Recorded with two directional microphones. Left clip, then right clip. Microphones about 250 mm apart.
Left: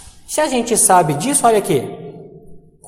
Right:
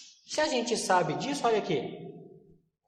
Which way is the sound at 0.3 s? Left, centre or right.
Left.